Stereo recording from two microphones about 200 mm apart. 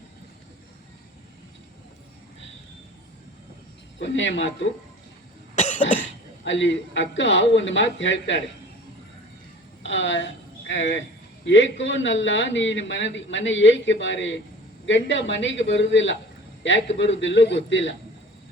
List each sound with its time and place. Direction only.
3.9 s speech: 65° left (ahead or behind)
5.5 s cough: 35° left (ahead or behind)
6.4 s speech: 65° left (ahead or behind)
9.8 s a woman's voice: 65° left (ahead or behind)